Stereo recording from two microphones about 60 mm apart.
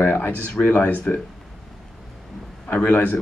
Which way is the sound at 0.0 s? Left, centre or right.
Left.